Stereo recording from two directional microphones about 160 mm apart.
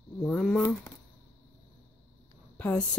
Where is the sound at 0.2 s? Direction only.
5° left (ahead or behind).